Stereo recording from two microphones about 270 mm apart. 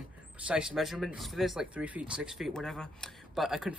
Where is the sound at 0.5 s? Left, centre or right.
Centre.